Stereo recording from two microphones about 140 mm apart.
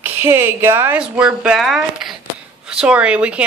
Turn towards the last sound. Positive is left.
turn(degrees=-10)  # may be behind; listen again after turning